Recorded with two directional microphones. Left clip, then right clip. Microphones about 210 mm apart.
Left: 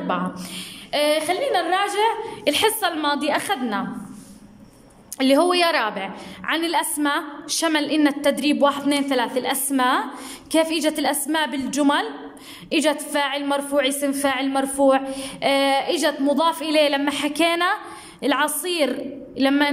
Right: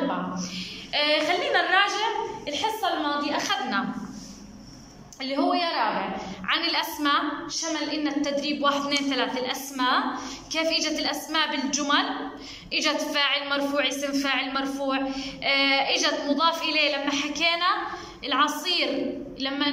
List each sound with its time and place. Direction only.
0.4 s a sound: 30° left (ahead or behind)
2.4 s a woman's voice: 50° left (ahead or behind)
5.2 s a woman's voice: 50° left (ahead or behind)